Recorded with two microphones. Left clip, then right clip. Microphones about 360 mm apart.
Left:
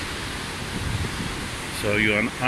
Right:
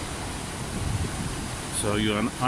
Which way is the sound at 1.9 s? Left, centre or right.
Centre.